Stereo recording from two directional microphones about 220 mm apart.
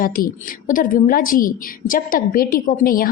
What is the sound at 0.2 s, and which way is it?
A woman's voice, 40° left (ahead or behind).